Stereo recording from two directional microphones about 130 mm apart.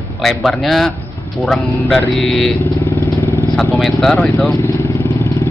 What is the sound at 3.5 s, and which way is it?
Speech, centre (ahead or behind).